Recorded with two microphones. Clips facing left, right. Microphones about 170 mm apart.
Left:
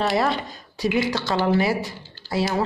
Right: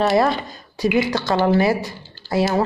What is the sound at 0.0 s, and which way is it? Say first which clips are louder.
Speech: right 5 dB; 40° right (ahead or behind).